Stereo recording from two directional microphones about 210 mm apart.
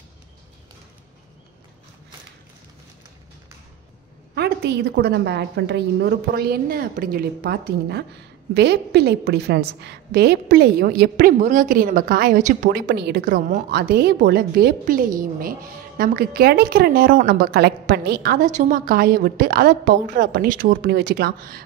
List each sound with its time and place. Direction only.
4.4 s a woman's voice: 50° right (ahead or behind)